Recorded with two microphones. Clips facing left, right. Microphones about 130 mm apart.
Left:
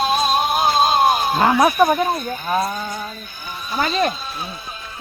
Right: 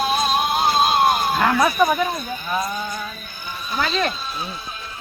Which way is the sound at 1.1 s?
20° left (ahead or behind).